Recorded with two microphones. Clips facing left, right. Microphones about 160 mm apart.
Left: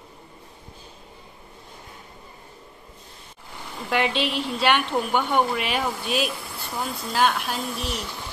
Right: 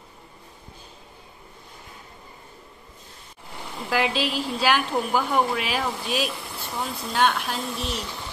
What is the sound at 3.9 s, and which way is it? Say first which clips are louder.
A woman's voice: left 1 dB; centre (ahead or behind).